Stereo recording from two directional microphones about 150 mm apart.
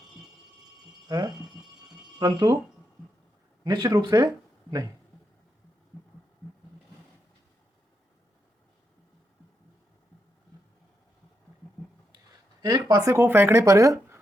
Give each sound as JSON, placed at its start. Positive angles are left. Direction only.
{"t": 1.0, "sound": "speech", "side_deg": -25}
{"t": 3.6, "sound": "speech", "side_deg": -30}
{"t": 12.6, "sound": "speech", "side_deg": -25}